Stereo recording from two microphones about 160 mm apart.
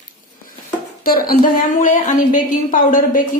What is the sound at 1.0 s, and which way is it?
A woman's voice, 65° left (ahead or behind).